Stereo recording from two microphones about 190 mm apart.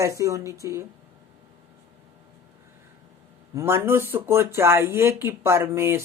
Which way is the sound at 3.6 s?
10° right (ahead or behind).